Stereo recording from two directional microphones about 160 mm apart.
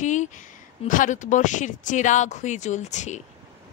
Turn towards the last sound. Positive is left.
turn(degrees=50)  # may be behind; listen again after turning